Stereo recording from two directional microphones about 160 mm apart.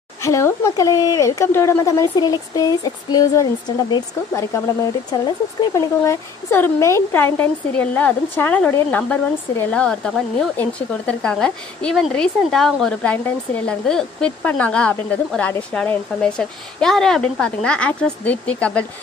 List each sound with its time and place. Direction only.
0.2 s a woman's voice: 20° left (ahead or behind)